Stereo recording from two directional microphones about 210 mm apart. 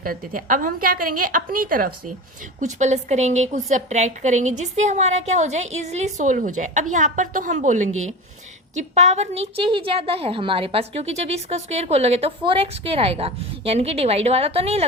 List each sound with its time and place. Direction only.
0.0 s a woman's voice: 40° right (ahead or behind)